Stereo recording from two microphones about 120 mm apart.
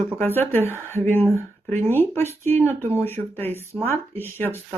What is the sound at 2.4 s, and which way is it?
A woman's voice, 20° left (ahead or behind).